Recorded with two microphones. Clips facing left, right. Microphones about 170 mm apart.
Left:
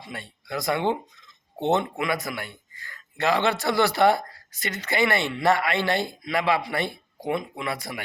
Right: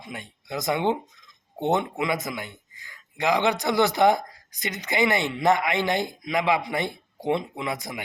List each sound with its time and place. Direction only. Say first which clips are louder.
0.0 s speech: even; 15° right (ahead or behind)